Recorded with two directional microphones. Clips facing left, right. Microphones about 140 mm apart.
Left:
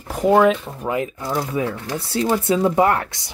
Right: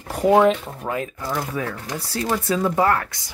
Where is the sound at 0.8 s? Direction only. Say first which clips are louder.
Left 3 dB; 15° left (ahead or behind).